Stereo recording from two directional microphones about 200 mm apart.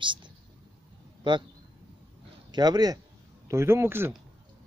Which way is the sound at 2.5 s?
20° right (ahead or behind).